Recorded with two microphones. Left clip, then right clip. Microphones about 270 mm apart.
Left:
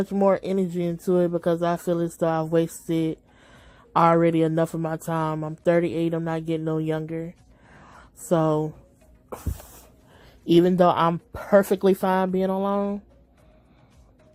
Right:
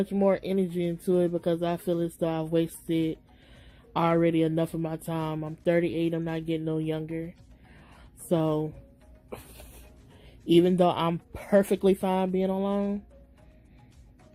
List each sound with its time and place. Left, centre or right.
0.0 s speech: left
10.4 s speech: left